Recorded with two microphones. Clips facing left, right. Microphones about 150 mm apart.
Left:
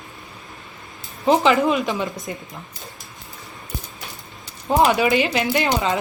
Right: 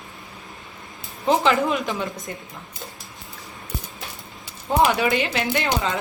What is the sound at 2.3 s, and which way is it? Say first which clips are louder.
Speech: left 3 dB; 15° left (ahead or behind).